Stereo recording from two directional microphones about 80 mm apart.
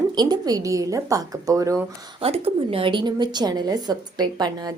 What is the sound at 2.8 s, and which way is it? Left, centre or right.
A woman's voice, right.